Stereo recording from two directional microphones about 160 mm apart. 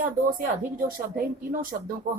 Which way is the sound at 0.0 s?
60° right (ahead or behind).